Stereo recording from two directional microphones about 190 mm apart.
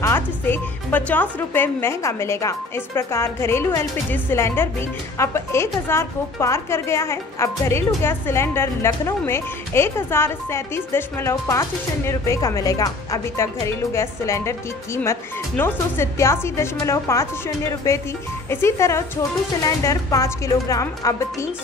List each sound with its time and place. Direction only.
0.0 s speech: 10° left (ahead or behind)